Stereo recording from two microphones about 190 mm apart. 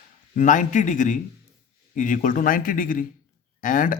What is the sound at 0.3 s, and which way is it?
Speech, 40° left (ahead or behind).